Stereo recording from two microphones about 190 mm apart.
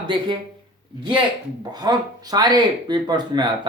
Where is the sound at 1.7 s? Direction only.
20° right (ahead or behind).